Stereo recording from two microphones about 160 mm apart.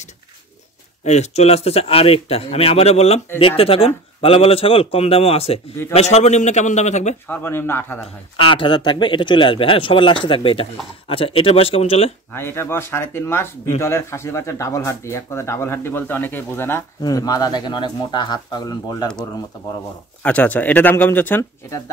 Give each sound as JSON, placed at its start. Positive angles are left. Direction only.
{"t": 1.0, "sound": "a man's voice", "side_deg": 45}
{"t": 7.2, "sound": "speech", "side_deg": 15}
{"t": 8.4, "sound": "speech", "side_deg": 35}
{"t": 12.3, "sound": "speech", "side_deg": 15}
{"t": 20.2, "sound": "speech", "side_deg": 10}